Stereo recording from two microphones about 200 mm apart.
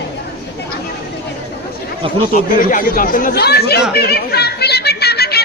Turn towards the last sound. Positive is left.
turn(degrees=55)  # may be behind; listen again after turning